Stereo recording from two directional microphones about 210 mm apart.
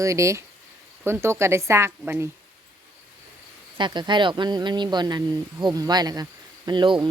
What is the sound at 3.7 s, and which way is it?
Speech, 20° right (ahead or behind).